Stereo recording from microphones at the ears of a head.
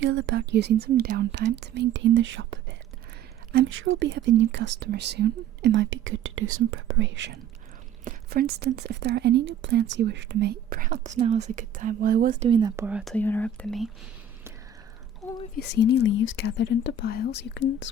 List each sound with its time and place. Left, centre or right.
0.0 s speech: right
13.1 s speech: centre
15.5 s speech: left